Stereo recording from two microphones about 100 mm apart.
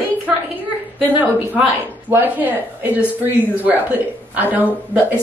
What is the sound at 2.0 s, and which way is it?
Speech, 20° right (ahead or behind).